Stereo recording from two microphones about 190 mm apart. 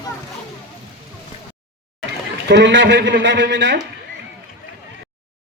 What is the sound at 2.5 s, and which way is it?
A man's voice, 70° right (ahead or behind).